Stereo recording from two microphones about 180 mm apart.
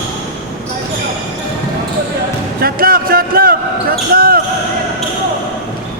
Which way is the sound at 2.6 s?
55° right (ahead or behind).